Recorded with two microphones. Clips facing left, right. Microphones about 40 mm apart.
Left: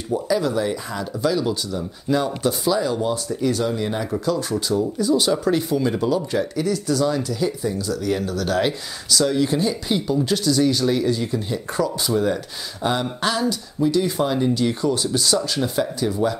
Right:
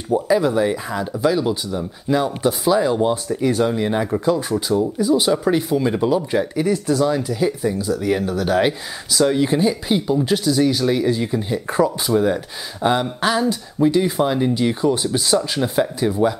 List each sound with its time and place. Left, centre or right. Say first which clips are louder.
0.1 s speech: right 4 dB; right
12.1 s a sound: right 3 dB; centre
13.5 s speech: right 3 dB; right